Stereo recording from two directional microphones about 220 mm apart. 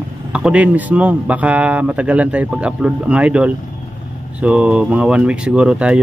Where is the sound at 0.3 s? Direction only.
5° right (ahead or behind).